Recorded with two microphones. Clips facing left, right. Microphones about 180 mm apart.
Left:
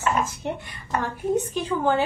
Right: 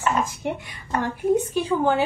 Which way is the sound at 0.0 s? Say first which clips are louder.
Right 1 dB; 10° right (ahead or behind).